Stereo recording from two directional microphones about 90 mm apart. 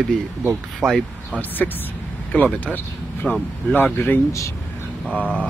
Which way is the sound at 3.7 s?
20° left (ahead or behind).